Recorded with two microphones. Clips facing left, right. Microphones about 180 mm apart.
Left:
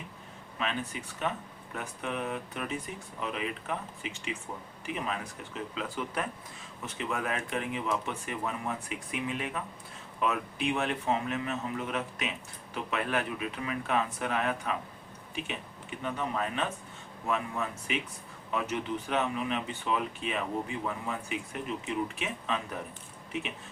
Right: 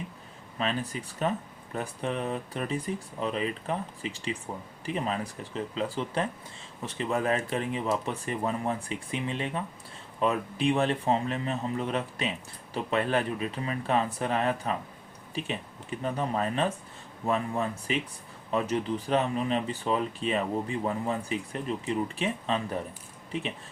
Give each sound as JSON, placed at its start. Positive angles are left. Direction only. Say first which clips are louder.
{"t": 0.6, "sound": "speech", "louder": "right 3 dB", "side_deg": -35}